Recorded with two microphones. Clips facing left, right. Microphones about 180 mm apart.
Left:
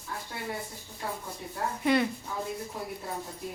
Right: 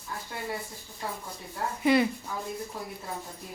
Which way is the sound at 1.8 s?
5° right (ahead or behind).